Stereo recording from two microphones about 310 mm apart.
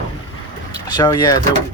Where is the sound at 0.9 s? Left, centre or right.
Centre.